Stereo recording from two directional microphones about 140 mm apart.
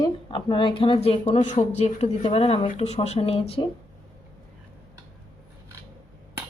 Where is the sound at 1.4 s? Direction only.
55° left (ahead or behind).